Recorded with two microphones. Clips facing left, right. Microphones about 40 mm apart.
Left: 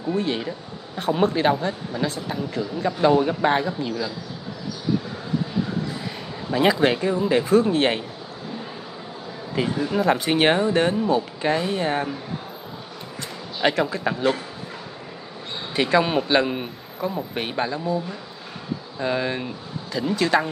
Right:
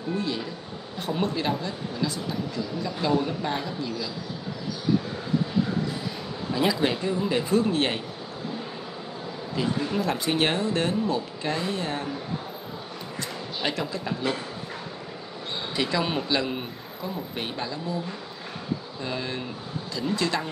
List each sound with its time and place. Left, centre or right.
0.1 s speech: left
6.5 s speech: left
9.8 s speech: left
13.6 s speech: left
15.7 s speech: left
18.9 s speech: left